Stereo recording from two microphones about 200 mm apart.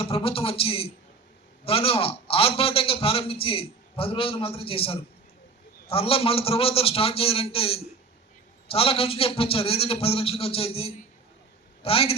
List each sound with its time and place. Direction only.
0.0 s a man's voice: 25° left (ahead or behind)